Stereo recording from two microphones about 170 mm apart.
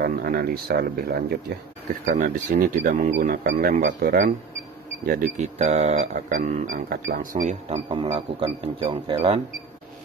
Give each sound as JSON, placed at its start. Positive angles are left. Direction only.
{"t": 0.0, "sound": "speech", "side_deg": -60}
{"t": 2.1, "sound": "speech", "side_deg": -50}
{"t": 7.7, "sound": "speech", "side_deg": -35}